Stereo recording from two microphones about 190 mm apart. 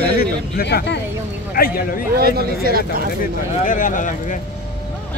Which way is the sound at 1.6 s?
50° left (ahead or behind).